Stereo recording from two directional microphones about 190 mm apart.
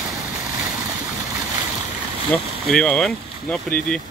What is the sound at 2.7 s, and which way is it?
Speech, 5° left (ahead or behind).